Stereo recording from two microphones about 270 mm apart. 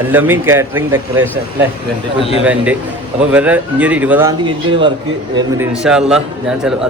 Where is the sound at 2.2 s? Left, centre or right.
Left.